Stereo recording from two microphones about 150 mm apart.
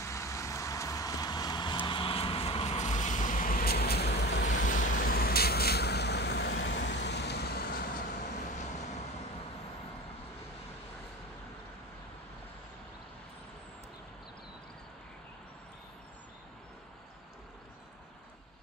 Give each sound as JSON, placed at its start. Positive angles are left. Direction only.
{"t": 0.0, "sound": "vehicle", "side_deg": 20}
{"t": 8.3, "sound": "vehicle", "side_deg": 50}